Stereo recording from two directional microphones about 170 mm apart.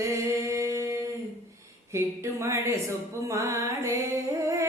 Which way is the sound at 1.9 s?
15° right (ahead or behind).